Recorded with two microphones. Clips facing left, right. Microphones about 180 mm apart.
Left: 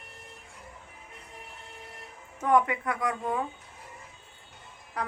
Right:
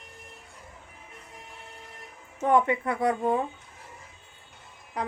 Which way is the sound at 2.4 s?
25° right (ahead or behind).